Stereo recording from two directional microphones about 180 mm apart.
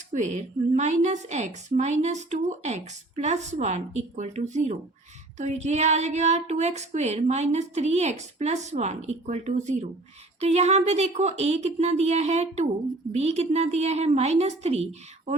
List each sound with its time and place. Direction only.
0.1 s a woman's voice: 40° right (ahead or behind)